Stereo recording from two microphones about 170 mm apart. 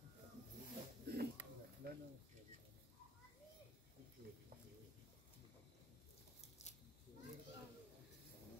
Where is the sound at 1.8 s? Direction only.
60° right (ahead or behind).